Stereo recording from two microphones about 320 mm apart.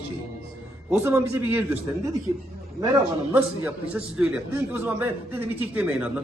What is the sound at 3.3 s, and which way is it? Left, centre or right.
A man's voice, centre.